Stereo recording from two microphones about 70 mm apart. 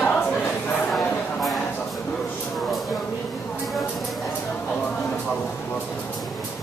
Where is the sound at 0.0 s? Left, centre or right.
Left.